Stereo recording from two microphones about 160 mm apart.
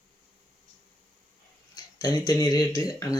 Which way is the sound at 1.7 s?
25° left (ahead or behind).